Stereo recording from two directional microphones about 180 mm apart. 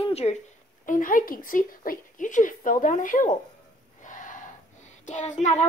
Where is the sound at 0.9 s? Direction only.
50° left (ahead or behind).